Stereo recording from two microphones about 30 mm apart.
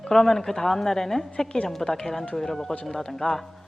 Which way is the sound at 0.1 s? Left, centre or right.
Centre.